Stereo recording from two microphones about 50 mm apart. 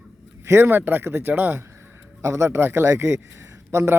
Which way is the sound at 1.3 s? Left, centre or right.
Right.